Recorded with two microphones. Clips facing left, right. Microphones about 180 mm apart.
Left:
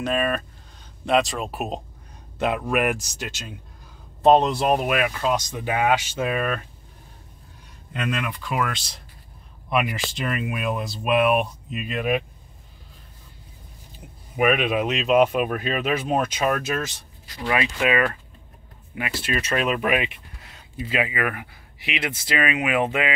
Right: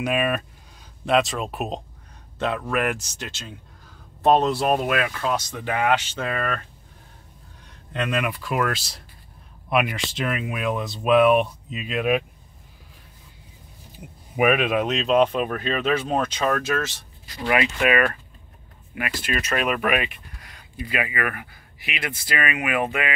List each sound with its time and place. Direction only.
0.0 s speech: 10° right (ahead or behind); by 6.6 s 10° left (ahead or behind)
7.9 s speech: 5° left (ahead or behind)
14.3 s speech: 5° right (ahead or behind); by 23.1 s 20° left (ahead or behind)